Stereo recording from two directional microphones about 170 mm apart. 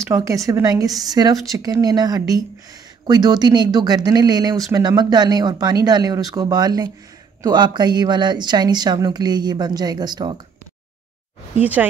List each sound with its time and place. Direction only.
0.1 s speech: 20° right (ahead or behind)
11.5 s speech: 10° right (ahead or behind)